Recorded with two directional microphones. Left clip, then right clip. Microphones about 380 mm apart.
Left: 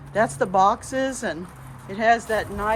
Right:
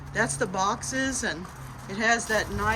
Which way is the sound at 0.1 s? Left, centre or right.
Centre.